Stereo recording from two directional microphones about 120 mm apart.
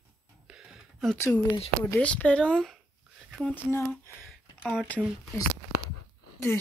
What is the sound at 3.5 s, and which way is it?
Speech, 20° left (ahead or behind).